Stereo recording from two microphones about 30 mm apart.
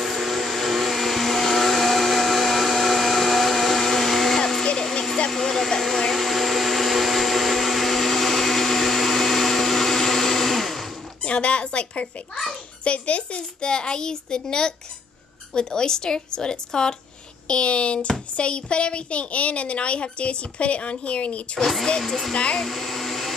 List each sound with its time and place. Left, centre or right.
0.0 s vacuum cleaner: centre
5.4 s vacuum cleaner: centre
11.2 s a sound: left
12.8 s a child's voice: left
13.6 s a woman's voice: left
22.0 s speech: centre
22.3 s a woman's voice: left
22.6 s hair dryer: centre